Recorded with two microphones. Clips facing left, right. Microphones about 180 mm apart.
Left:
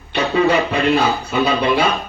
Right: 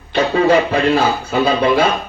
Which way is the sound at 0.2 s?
40° right (ahead or behind).